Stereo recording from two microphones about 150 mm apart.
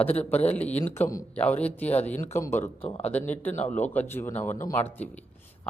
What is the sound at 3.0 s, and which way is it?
Speech, 10° left (ahead or behind).